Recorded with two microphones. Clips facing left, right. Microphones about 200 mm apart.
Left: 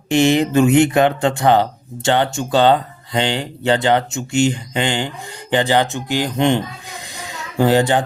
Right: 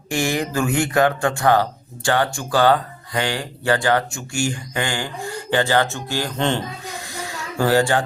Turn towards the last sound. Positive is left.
turn(degrees=20)  # may be behind; listen again after turning